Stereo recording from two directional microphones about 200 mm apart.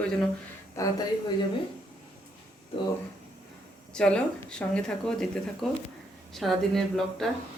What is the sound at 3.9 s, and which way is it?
Speech, 5° left (ahead or behind).